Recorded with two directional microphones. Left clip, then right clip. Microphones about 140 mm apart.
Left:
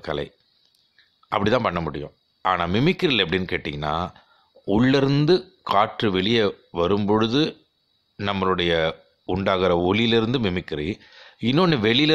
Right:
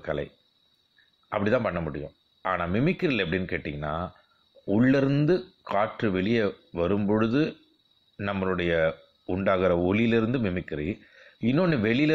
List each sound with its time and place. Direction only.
0.0 s speech: 25° left (ahead or behind)
1.3 s speech: 35° left (ahead or behind)